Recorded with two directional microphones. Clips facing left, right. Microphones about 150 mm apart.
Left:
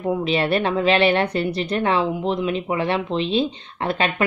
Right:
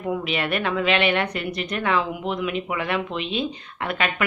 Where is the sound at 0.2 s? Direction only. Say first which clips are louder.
Left 5 dB; 30° left (ahead or behind).